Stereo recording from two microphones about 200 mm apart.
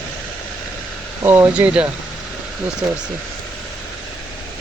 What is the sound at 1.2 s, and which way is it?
Speech, 10° right (ahead or behind).